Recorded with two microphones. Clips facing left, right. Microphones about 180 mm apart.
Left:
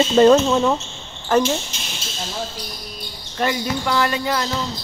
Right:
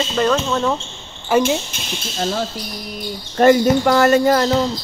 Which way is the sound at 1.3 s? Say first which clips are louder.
Right 1 dB; 10° right (ahead or behind).